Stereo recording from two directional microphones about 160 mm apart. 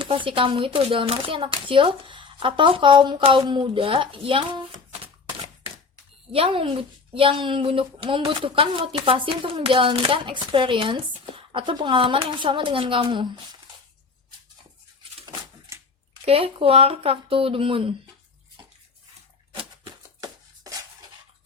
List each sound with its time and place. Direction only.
0.0 s a child's voice: 30° right (ahead or behind)
6.3 s a child's voice: 35° right (ahead or behind)
16.2 s a child's voice: 35° right (ahead or behind)
19.5 s a sound: 25° right (ahead or behind)